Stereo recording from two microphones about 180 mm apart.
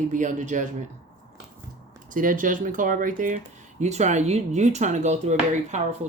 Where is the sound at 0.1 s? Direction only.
45° right (ahead or behind).